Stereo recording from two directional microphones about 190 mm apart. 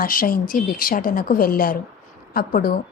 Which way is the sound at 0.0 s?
50° left (ahead or behind).